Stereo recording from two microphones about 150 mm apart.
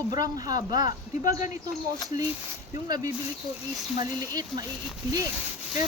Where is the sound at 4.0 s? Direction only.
25° right (ahead or behind).